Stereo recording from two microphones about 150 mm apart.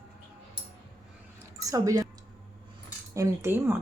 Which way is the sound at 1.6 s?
25° right (ahead or behind).